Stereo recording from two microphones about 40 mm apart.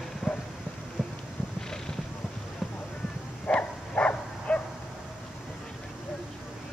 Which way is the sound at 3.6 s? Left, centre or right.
Left.